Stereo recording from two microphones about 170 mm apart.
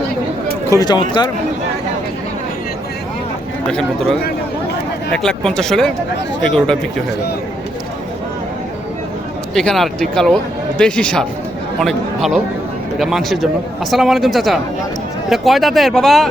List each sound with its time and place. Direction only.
0.7 s speech: 25° left (ahead or behind)
3.7 s speech: 5° left (ahead or behind)
9.6 s speech: centre (ahead or behind)